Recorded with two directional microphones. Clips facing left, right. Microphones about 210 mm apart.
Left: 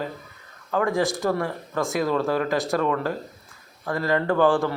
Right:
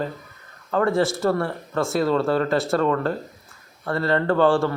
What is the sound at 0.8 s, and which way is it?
Speech, 15° left (ahead or behind).